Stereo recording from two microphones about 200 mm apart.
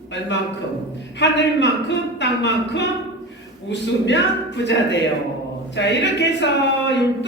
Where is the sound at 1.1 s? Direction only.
60° left (ahead or behind).